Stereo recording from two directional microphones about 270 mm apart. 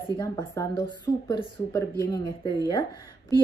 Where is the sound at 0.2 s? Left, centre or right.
Centre.